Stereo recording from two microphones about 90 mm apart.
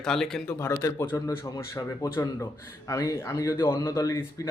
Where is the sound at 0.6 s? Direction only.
35° left (ahead or behind).